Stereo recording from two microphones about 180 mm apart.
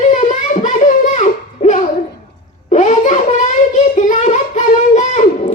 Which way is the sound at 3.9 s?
45° left (ahead or behind).